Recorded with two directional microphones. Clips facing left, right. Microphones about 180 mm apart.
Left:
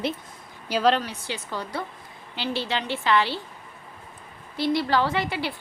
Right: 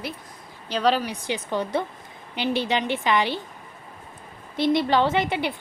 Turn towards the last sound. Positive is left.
turn(degrees=-20)  # may be behind; listen again after turning